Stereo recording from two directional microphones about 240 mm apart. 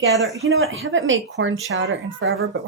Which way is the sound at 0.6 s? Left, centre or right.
Right.